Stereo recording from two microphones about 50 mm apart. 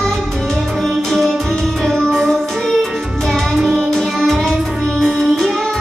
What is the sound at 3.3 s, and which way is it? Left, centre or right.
Music, centre.